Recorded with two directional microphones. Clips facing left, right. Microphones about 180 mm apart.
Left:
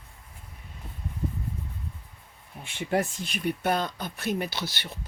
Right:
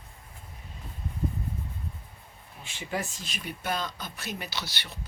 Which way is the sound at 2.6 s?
60° left (ahead or behind).